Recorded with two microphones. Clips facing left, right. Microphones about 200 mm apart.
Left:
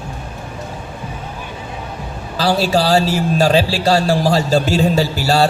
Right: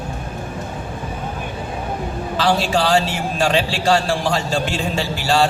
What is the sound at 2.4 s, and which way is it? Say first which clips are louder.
A man's voice: left 3 dB; 35° left (ahead or behind).